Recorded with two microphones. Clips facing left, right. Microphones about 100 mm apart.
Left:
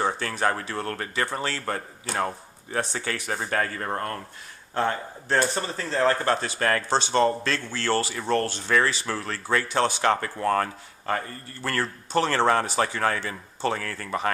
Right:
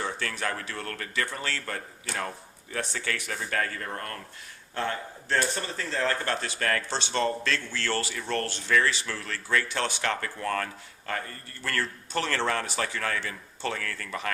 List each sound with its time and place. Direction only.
0.0 s speech: 35° left (ahead or behind)